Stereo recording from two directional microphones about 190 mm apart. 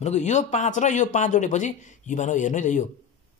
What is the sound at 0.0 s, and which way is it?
Speech, 35° left (ahead or behind).